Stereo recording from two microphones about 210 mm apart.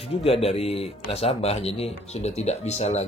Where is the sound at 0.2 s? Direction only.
30° left (ahead or behind).